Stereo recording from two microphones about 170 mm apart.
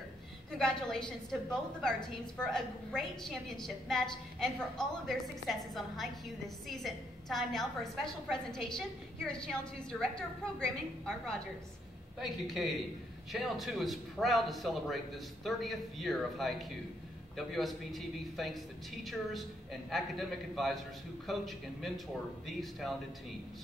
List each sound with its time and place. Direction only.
0.5 s a woman's voice: 5° left (ahead or behind)